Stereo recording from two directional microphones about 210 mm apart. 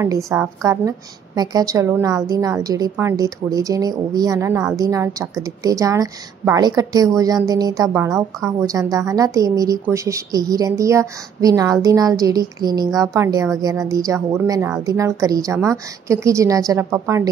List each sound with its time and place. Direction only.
0.0 s a woman's voice: 15° right (ahead or behind)